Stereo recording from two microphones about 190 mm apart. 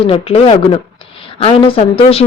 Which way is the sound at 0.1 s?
25° left (ahead or behind).